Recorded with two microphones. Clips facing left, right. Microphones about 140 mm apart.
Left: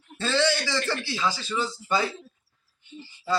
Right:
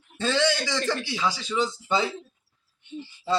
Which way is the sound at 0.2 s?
15° right (ahead or behind).